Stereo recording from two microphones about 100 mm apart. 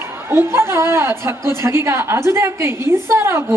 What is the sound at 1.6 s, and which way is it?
A woman's voice, 25° right (ahead or behind).